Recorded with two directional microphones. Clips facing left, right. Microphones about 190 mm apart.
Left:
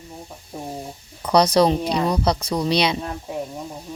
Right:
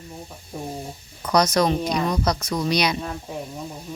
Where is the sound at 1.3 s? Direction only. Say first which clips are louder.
Left 3 dB; 30° left (ahead or behind).